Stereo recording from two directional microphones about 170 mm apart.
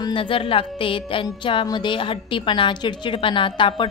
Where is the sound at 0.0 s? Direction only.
30° left (ahead or behind).